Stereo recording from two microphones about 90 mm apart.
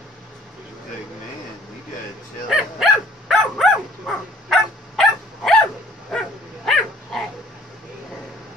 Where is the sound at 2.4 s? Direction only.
Centre (ahead or behind).